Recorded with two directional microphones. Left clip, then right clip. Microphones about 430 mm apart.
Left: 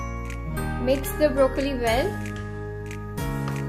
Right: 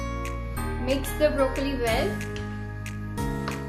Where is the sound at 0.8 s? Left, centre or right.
Centre.